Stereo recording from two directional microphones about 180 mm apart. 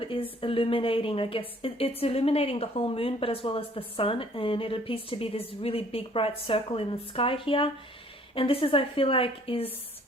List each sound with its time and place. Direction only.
0.0 s a woman's voice: 30° left (ahead or behind)